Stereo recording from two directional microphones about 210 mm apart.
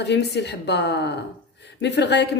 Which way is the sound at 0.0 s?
55° left (ahead or behind).